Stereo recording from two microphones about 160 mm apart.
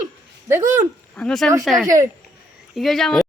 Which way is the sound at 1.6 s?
Centre (ahead or behind).